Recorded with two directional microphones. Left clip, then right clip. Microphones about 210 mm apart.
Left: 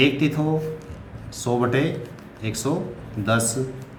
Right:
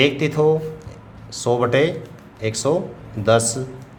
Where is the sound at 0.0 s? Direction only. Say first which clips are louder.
Right 4 dB; 40° right (ahead or behind).